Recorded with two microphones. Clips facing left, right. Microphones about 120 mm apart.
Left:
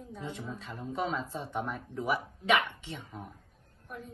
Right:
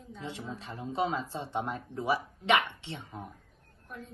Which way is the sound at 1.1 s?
30° right (ahead or behind).